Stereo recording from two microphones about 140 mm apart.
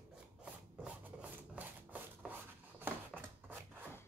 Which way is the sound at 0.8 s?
10° right (ahead or behind).